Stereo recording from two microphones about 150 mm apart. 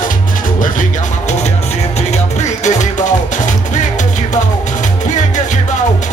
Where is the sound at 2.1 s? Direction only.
50° left (ahead or behind).